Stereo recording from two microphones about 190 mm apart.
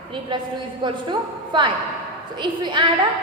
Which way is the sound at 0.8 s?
25° right (ahead or behind).